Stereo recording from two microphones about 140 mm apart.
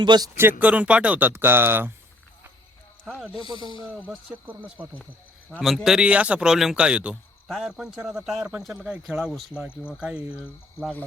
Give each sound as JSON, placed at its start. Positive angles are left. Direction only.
{"t": 0.0, "sound": "speech", "side_deg": -30}
{"t": 0.6, "sound": "speech", "side_deg": -10}
{"t": 3.6, "sound": "speech", "side_deg": 35}
{"t": 3.8, "sound": "speech", "side_deg": -10}